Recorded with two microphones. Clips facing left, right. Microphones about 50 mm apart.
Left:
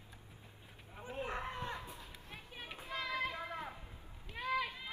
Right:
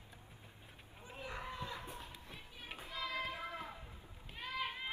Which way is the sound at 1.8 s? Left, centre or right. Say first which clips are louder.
Right 1 dB; right.